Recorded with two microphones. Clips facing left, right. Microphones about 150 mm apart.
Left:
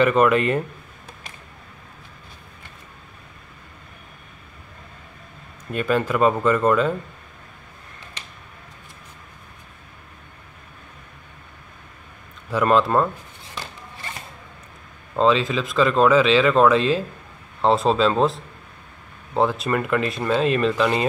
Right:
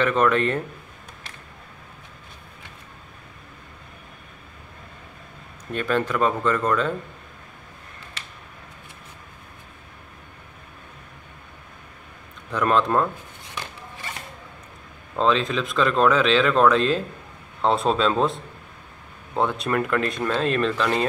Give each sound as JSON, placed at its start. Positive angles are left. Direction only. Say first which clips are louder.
{"t": 0.0, "sound": "speech", "louder": "left 3 dB", "side_deg": 10}
{"t": 5.7, "sound": "speech", "louder": "left 2 dB", "side_deg": 5}
{"t": 12.4, "sound": "speech", "louder": "left 3 dB", "side_deg": 5}
{"t": 15.1, "sound": "speech", "louder": "left 3 dB", "side_deg": 0}
{"t": 19.4, "sound": "speech", "louder": "left 1 dB", "side_deg": 0}